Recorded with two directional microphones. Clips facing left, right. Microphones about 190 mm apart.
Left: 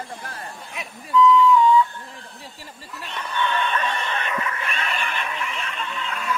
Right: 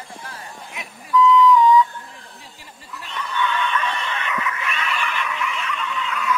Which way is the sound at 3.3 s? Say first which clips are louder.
Right 1 dB; 35° left (ahead or behind).